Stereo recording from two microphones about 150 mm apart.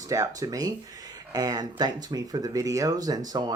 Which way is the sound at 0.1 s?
25° right (ahead or behind).